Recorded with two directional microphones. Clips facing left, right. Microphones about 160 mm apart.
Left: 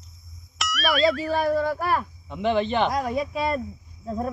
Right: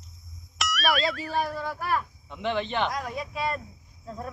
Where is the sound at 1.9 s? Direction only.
40° left (ahead or behind).